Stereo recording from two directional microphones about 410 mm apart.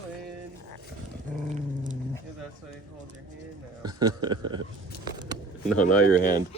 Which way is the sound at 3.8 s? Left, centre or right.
Centre.